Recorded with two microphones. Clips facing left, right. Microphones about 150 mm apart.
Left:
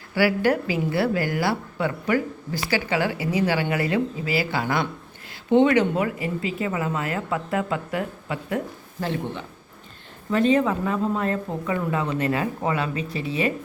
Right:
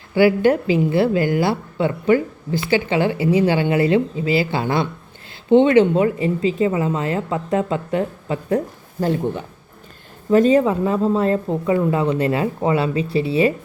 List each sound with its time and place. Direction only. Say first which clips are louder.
0.1 s a woman's voice: right 6 dB; 20° right (ahead or behind)